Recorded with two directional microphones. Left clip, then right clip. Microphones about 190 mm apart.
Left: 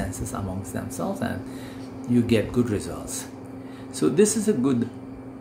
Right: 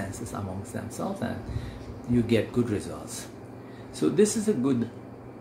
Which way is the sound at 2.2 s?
20° left (ahead or behind).